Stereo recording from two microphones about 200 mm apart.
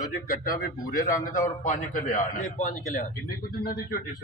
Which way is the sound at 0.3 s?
45° left (ahead or behind).